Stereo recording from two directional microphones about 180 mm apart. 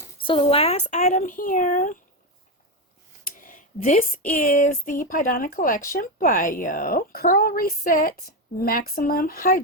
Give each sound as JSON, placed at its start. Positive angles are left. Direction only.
{"t": 0.2, "sound": "speech", "side_deg": 30}
{"t": 3.2, "sound": "a sound", "side_deg": 50}
{"t": 4.3, "sound": "speech", "side_deg": 50}